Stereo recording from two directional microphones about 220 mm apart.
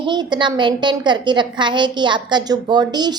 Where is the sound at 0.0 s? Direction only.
20° right (ahead or behind).